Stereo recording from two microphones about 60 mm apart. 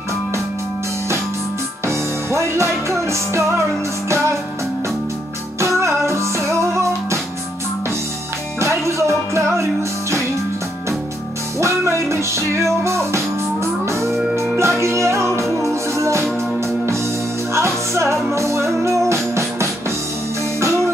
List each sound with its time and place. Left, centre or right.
1.9 s music: right
5.6 s music: right
8.5 s music: right
11.6 s music: right
14.3 s music: right
17.6 s music: right